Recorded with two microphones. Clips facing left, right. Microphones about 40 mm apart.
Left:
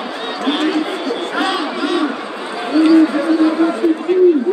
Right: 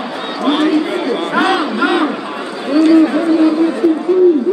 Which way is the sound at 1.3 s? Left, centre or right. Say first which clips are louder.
Right 6 dB; centre.